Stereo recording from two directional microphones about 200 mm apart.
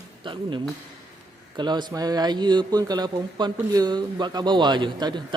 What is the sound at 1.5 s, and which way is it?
Speech, 20° right (ahead or behind).